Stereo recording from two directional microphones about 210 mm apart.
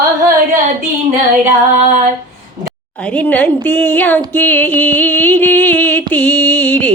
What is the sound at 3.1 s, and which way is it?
Music, 5° left (ahead or behind).